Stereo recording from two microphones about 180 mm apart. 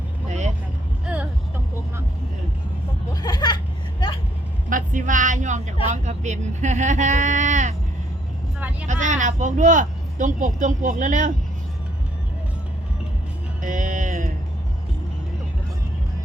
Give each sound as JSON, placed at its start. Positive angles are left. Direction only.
{"t": 0.3, "sound": "vehicle", "side_deg": -40}
{"t": 1.0, "sound": "vehicle", "side_deg": -5}
{"t": 3.1, "sound": "chuckle", "side_deg": 20}
{"t": 4.7, "sound": "speech", "side_deg": -45}
{"t": 8.9, "sound": "speech", "side_deg": -45}
{"t": 13.6, "sound": "music", "side_deg": -45}